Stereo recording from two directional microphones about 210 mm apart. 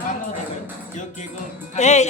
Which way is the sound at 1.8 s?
35° left (ahead or behind).